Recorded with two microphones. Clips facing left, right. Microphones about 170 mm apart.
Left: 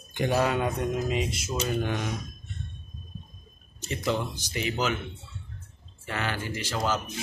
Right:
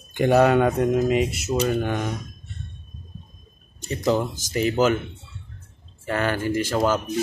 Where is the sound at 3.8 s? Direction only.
40° right (ahead or behind).